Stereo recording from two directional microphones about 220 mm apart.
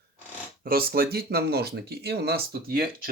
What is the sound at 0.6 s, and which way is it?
Speech, 45° right (ahead or behind).